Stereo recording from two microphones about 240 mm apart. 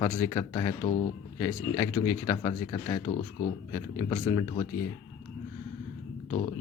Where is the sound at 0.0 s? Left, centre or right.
Centre.